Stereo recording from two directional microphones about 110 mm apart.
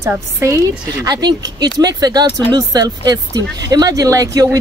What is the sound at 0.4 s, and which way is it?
Speech, 30° right (ahead or behind).